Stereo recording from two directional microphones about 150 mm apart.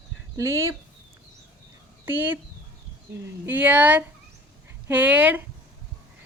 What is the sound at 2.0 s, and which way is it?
Speech, 10° right (ahead or behind).